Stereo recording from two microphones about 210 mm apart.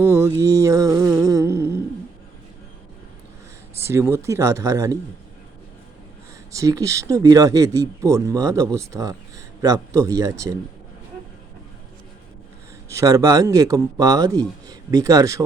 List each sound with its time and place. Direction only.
0.0 s speech: 10° right (ahead or behind)
3.8 s speech: 10° right (ahead or behind)
6.5 s speech: 15° right (ahead or behind)
12.9 s speech: 15° right (ahead or behind)